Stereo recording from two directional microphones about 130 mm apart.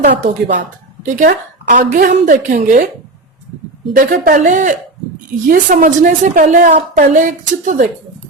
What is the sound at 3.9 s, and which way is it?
A woman's voice, 90° right.